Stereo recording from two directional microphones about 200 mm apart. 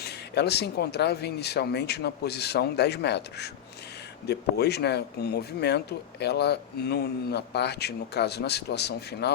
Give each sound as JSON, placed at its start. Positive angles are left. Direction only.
{"t": 0.0, "sound": "speech", "side_deg": 55}